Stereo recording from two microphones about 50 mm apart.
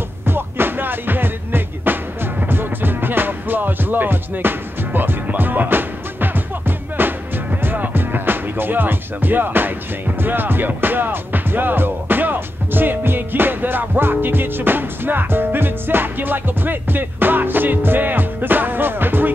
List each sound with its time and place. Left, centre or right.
0.3 s music: right